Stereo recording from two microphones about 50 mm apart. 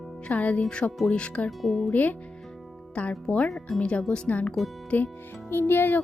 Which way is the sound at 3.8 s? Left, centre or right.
Left.